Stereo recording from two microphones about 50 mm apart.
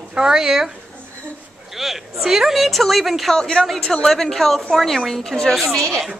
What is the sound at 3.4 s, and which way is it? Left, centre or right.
A woman's voice, centre.